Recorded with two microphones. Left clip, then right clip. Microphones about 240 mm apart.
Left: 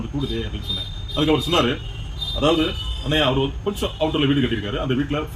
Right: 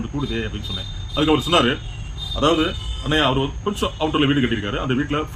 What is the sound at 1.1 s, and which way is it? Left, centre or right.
Speech, centre.